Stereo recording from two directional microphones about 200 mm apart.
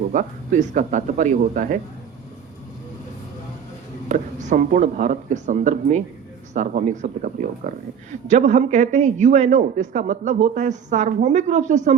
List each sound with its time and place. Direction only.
0.1 s a man's voice: 40° right (ahead or behind)
4.1 s a man's voice: 40° right (ahead or behind)